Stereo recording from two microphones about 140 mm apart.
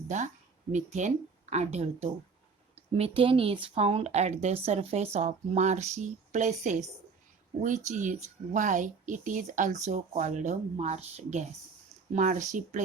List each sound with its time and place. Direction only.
0.7 s a woman's voice: 60° right (ahead or behind)
7.9 s a woman's voice: 60° right (ahead or behind)